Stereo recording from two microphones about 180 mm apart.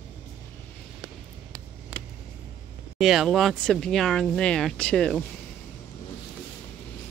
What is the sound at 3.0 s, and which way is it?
Speech, centre (ahead or behind).